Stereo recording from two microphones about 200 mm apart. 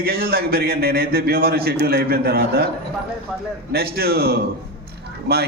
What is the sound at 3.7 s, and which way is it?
Speech, 50° right (ahead or behind).